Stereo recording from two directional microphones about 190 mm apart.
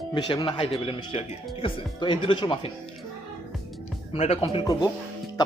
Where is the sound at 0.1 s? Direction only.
25° left (ahead or behind).